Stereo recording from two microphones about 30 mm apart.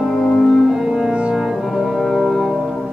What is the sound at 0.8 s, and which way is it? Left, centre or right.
Music, centre.